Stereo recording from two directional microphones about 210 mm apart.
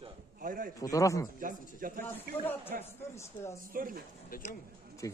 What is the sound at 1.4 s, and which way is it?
Speech, 40° right (ahead or behind).